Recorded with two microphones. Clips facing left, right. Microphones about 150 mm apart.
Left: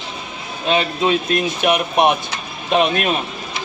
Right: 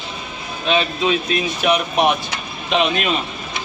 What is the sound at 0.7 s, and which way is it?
Speech, 45° left (ahead or behind).